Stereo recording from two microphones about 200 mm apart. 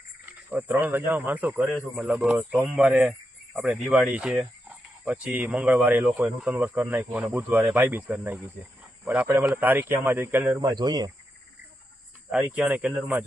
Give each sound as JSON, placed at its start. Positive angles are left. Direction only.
{"t": 0.5, "sound": "speech", "side_deg": -10}
{"t": 10.6, "sound": "speech", "side_deg": -20}
{"t": 12.5, "sound": "speech", "side_deg": -5}